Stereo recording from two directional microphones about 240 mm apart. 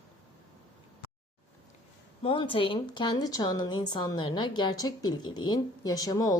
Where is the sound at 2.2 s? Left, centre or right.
Left.